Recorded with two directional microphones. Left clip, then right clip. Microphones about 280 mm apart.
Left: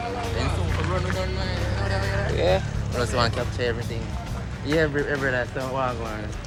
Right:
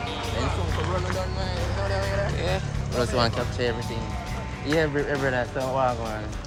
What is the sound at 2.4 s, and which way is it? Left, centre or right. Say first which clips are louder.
Speech: left 6 dB; centre.